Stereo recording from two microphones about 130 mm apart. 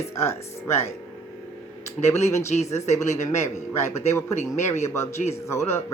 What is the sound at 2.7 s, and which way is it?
Speech, 60° left (ahead or behind).